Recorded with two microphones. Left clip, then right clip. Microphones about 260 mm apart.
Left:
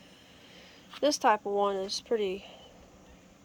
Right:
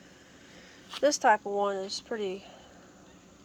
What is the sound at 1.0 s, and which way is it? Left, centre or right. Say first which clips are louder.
Speech: right 2 dB; centre.